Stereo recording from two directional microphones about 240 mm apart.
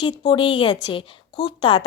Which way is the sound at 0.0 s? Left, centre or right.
Left.